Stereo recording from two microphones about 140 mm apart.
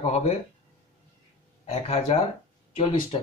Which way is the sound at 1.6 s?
45° left (ahead or behind).